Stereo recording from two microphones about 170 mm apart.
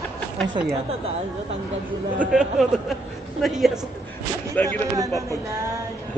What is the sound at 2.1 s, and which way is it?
A man's voice, 5° right (ahead or behind).